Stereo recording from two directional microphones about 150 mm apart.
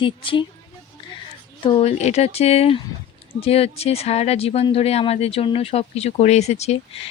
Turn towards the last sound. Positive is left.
turn(degrees=45)  # may be behind; listen again after turning